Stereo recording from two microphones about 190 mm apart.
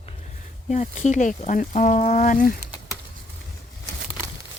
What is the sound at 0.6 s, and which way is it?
Speech, 35° left (ahead or behind).